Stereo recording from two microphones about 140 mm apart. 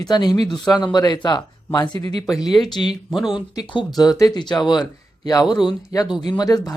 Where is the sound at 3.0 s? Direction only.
5° right (ahead or behind).